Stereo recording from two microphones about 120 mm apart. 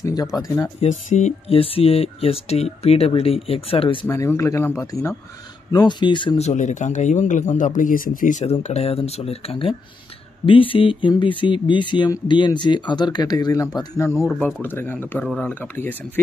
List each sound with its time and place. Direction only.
0.0 s speech: 35° left (ahead or behind)
0.7 s speech: 90° left
1.5 s speech: 50° left (ahead or behind)
4.1 s speech: 25° left (ahead or behind)
5.7 s speech: 35° left (ahead or behind)
6.3 s speech: 75° left (ahead or behind); by 14.0 s 30° left (ahead or behind)
14.1 s speech: centre (ahead or behind)
14.4 s speech: 15° left (ahead or behind)
15.2 s speech: 5° left (ahead or behind)
15.6 s speech: 15° left (ahead or behind)